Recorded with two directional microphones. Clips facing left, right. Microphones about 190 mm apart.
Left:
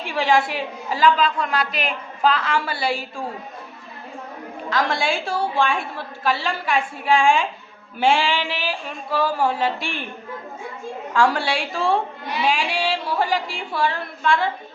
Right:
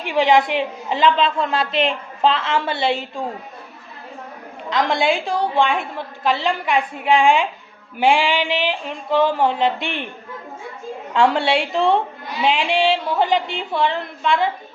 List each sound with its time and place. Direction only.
0.0 s a woman's voice: 20° right (ahead or behind)
4.7 s a woman's voice: 20° right (ahead or behind)
11.1 s a woman's voice: 20° right (ahead or behind)